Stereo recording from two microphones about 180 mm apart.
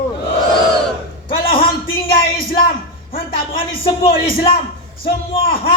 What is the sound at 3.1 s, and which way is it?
Speech, 30° left (ahead or behind).